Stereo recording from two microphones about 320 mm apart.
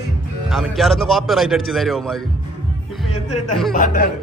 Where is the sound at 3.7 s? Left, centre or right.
Left.